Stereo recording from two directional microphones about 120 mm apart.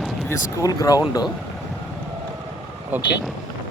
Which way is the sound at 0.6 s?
30° left (ahead or behind).